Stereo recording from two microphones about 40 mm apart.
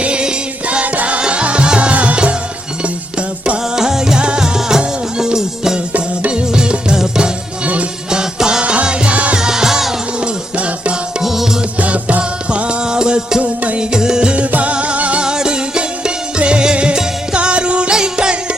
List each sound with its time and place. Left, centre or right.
0.0 s music: right
1.9 s music: right
3.6 s music: centre
8.1 s music: centre
8.6 s music: right
10.2 s music: right
11.2 s music: centre
11.8 s music: right; by 13.4 s centre
13.4 s music: right
13.7 s music: centre; by 15.2 s right
15.2 s music: right